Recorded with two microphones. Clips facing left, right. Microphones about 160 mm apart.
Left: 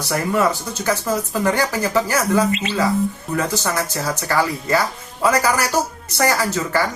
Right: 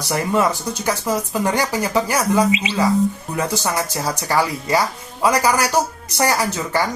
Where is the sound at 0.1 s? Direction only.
15° right (ahead or behind).